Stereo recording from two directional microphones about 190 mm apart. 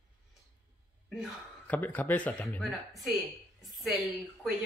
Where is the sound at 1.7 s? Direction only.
10° left (ahead or behind).